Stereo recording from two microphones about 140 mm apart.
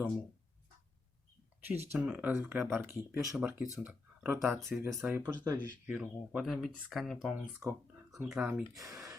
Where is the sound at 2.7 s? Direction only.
15° right (ahead or behind).